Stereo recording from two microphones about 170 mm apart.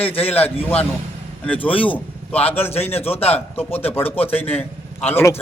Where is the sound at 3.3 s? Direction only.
10° left (ahead or behind).